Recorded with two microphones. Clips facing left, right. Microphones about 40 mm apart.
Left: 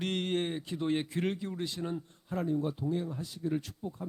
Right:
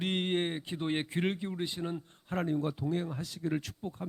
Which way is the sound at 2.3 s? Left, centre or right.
Right.